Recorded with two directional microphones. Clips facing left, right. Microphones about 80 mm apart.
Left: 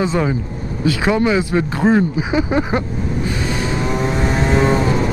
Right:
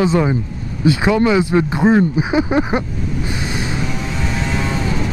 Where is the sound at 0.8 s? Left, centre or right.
Right.